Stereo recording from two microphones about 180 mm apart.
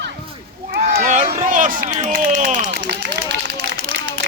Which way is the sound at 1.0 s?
45° right (ahead or behind).